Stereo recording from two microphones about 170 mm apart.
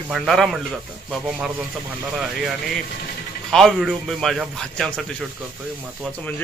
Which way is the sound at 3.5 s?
Centre (ahead or behind).